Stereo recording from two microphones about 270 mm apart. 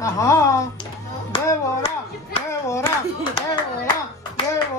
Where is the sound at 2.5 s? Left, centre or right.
Centre.